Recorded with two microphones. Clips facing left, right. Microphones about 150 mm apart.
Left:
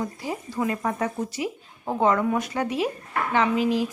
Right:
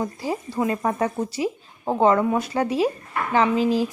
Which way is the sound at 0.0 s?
30° right (ahead or behind).